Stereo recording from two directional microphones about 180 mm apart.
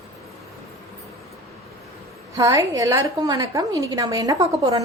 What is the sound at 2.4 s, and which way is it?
A woman's voice, 15° right (ahead or behind).